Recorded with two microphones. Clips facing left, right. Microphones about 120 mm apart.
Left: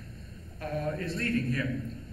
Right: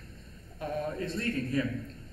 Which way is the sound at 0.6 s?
15° right (ahead or behind).